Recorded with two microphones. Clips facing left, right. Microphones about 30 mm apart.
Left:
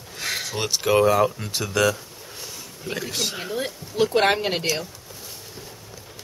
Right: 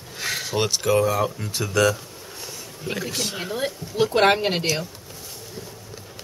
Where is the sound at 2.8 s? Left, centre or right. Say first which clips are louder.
Even; centre.